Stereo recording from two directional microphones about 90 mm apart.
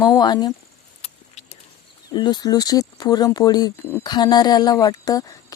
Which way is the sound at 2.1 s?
50° left (ahead or behind).